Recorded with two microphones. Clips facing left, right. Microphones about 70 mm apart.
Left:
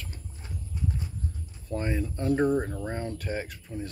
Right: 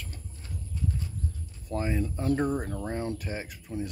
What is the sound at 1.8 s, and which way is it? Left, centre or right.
Speech, centre.